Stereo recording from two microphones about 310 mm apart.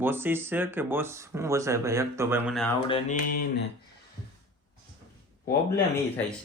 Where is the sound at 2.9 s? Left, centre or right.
Left.